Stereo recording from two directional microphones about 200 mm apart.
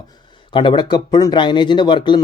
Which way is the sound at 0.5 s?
25° left (ahead or behind).